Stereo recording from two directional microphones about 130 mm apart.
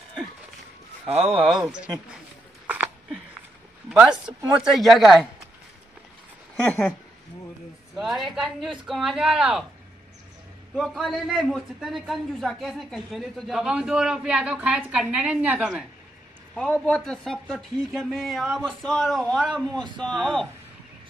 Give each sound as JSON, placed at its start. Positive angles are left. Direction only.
{"t": 1.0, "sound": "speech", "side_deg": -50}
{"t": 1.4, "sound": "speech", "side_deg": -5}
{"t": 2.6, "sound": "a sound", "side_deg": -10}
{"t": 3.9, "sound": "a man's voice", "side_deg": -10}
{"t": 6.5, "sound": "speech", "side_deg": 10}
{"t": 7.9, "sound": "a man's voice", "side_deg": 0}
{"t": 10.7, "sound": "a man's voice", "side_deg": 0}
{"t": 16.5, "sound": "a man's voice", "side_deg": 5}